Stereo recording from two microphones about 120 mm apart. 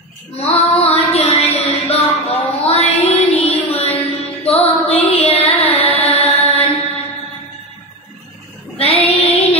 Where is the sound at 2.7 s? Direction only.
60° left (ahead or behind).